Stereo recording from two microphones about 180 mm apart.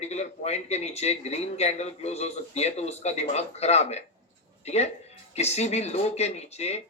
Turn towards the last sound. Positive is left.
turn(degrees=35)  # may be behind; listen again after turning